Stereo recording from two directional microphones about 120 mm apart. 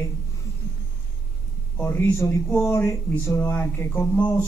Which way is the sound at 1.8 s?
20° left (ahead or behind).